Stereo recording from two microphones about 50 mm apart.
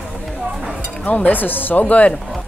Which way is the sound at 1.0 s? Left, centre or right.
Left.